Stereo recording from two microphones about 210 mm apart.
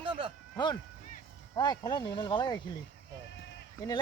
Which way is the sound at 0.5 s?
20° left (ahead or behind).